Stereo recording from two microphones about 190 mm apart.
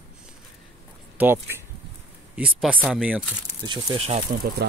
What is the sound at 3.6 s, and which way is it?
Speech, 30° right (ahead or behind).